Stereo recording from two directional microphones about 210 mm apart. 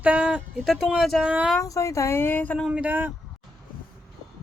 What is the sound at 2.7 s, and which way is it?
Speech, 5° right (ahead or behind).